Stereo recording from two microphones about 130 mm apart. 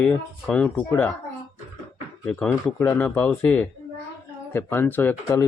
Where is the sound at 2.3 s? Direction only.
10° left (ahead or behind).